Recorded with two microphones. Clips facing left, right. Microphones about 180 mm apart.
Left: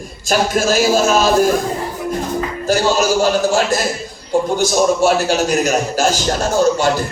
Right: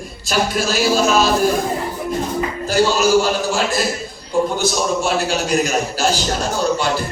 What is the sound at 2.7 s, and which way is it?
A man's voice, 45° left (ahead or behind).